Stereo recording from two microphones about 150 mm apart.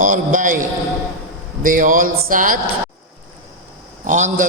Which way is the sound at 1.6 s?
65° right (ahead or behind).